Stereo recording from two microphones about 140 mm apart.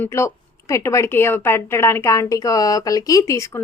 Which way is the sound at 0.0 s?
20° left (ahead or behind).